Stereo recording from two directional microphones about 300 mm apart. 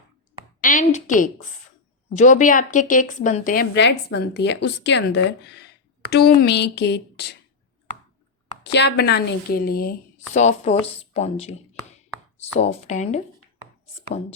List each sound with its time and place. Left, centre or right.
0.6 s a woman's voice: left
8.6 s a woman's voice: left